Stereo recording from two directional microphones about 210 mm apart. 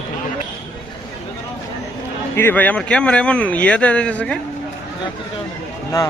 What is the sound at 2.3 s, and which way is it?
Speech, 10° left (ahead or behind).